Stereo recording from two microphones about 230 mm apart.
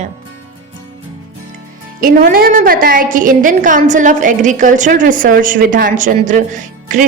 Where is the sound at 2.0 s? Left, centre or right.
Right.